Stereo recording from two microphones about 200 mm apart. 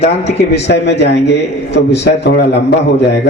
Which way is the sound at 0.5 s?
55° left (ahead or behind).